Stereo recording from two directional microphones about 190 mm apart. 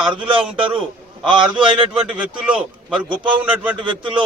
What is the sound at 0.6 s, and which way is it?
Speech, 25° right (ahead or behind).